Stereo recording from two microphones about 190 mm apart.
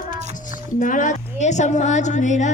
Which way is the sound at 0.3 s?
45° left (ahead or behind).